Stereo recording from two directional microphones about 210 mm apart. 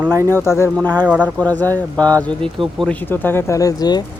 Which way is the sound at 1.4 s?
5° left (ahead or behind).